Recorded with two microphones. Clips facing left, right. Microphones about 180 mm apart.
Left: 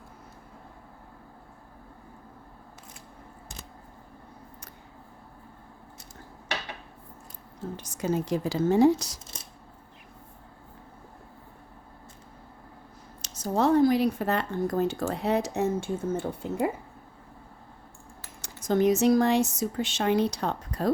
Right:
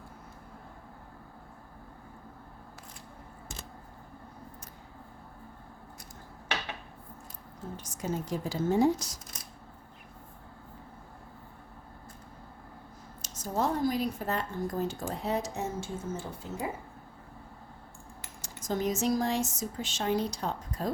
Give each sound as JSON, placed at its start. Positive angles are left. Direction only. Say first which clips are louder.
{"t": 7.8, "sound": "a woman's voice", "louder": "left 6 dB", "side_deg": 85}
{"t": 9.3, "sound": "a sound", "louder": "left 2 dB", "side_deg": 30}
{"t": 13.2, "sound": "a woman's voice", "louder": "left 6 dB", "side_deg": 75}
{"t": 18.4, "sound": "a woman's voice", "louder": "left 8 dB", "side_deg": 65}